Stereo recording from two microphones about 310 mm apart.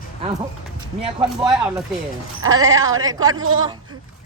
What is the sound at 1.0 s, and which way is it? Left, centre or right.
Speech, centre.